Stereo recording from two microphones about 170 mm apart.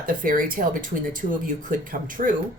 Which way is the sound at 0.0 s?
55° right (ahead or behind).